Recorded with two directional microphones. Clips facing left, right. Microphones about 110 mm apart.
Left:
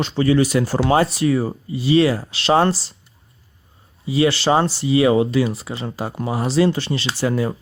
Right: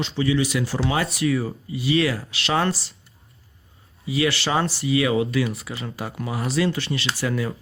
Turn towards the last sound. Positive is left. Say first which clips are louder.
# left 5 dB
turn(degrees=30)  # may be behind; listen again after turning